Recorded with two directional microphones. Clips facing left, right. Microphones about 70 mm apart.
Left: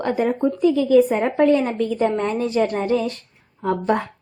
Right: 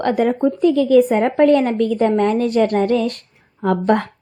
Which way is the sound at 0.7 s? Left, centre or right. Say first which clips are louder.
Right 2 dB; right.